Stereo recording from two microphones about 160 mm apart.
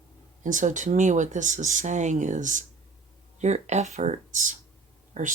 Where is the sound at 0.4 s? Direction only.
50° right (ahead or behind).